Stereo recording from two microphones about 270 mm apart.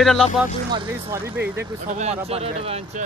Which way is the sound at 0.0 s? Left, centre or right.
Centre.